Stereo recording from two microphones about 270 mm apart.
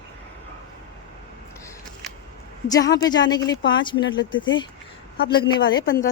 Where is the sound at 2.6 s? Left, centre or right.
Centre.